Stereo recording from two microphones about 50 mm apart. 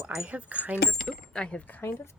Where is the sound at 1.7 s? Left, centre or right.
Left.